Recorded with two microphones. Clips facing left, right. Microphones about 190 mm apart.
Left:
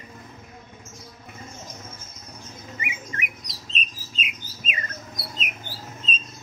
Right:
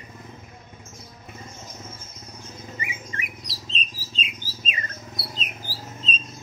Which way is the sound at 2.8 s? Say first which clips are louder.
Left 1 dB; 30° right (ahead or behind).